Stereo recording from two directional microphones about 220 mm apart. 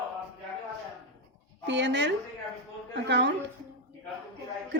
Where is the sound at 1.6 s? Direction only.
55° right (ahead or behind).